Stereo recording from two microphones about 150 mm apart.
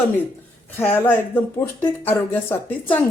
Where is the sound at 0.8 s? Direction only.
15° left (ahead or behind).